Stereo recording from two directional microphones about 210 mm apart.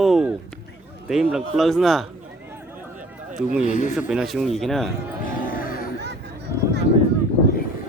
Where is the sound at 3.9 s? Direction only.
5° right (ahead or behind).